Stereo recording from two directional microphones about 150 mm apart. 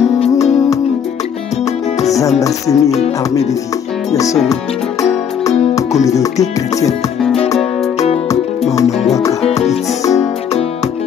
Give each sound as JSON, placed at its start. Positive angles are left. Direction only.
{"t": 0.3, "sound": "music", "side_deg": 20}
{"t": 2.4, "sound": "music", "side_deg": 20}
{"t": 4.1, "sound": "music", "side_deg": 20}
{"t": 6.0, "sound": "music", "side_deg": 20}
{"t": 9.4, "sound": "music", "side_deg": 45}